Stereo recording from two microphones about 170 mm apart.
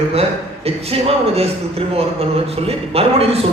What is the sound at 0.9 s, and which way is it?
Speech, 35° right (ahead or behind).